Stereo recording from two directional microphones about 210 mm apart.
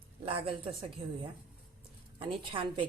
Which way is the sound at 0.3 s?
25° right (ahead or behind).